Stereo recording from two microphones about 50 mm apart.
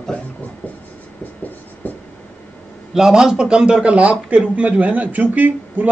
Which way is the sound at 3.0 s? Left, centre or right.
Centre.